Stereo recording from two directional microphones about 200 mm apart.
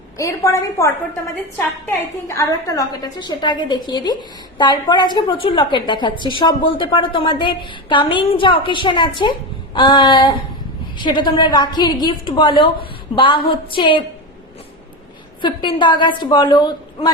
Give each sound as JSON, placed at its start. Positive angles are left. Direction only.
{"t": 0.2, "sound": "a woman's voice", "side_deg": 15}
{"t": 2.2, "sound": "a woman's voice", "side_deg": 15}
{"t": 15.4, "sound": "a woman's voice", "side_deg": 25}